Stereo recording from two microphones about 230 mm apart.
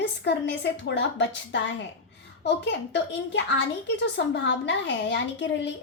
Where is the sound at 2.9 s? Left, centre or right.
Left.